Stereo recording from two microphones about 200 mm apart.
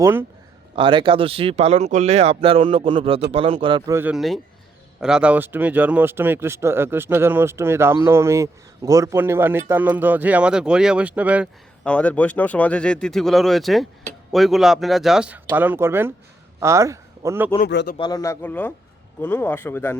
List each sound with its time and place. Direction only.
0.0 s speech: 10° right (ahead or behind)
0.8 s speech: 25° right (ahead or behind); by 11.9 s 5° right (ahead or behind)
11.9 s speech: 5° left (ahead or behind); by 17.5 s 15° right (ahead or behind)
17.7 s speech: 60° left (ahead or behind)
17.9 s a man's voice: 20° left (ahead or behind)